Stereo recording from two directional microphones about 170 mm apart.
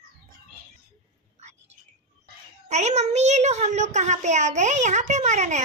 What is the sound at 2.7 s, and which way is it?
A child's voice, 40° right (ahead or behind).